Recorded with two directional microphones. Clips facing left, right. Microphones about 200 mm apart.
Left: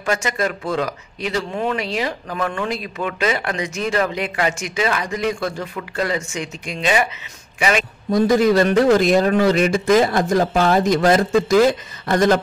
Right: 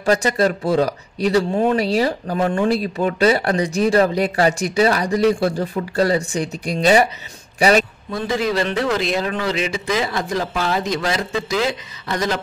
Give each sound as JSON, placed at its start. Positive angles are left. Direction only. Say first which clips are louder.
{"t": 0.0, "sound": "a man's voice", "louder": "right 5 dB", "side_deg": -35}
{"t": 8.1, "sound": "a man's voice", "louder": "left 8 dB", "side_deg": 40}